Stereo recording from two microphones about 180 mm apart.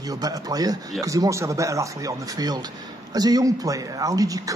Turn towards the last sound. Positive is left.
turn(degrees=-20)  # may be behind; listen again after turning